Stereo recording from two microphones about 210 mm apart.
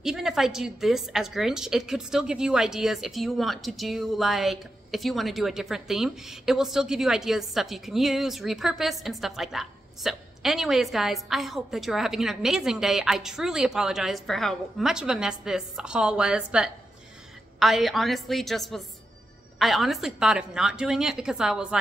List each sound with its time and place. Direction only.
0.0 s a woman's voice: centre (ahead or behind)